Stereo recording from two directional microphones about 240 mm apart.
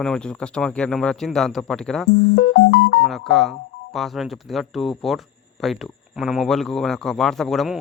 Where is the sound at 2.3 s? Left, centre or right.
Left.